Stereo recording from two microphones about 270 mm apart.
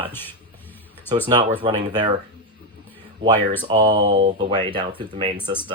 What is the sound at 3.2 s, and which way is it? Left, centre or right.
Speech, centre.